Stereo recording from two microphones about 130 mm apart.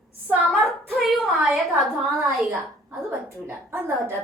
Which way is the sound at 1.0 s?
Centre (ahead or behind).